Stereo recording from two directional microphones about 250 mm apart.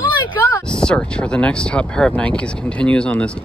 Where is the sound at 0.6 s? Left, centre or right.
Centre.